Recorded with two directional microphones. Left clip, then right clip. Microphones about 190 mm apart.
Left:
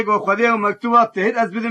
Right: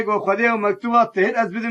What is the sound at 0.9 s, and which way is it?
Speech, 40° right (ahead or behind).